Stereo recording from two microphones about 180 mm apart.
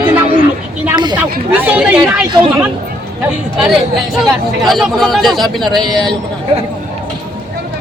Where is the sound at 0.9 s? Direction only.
25° right (ahead or behind).